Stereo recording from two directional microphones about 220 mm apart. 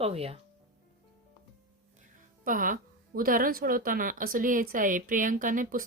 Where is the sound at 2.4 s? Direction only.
40° right (ahead or behind).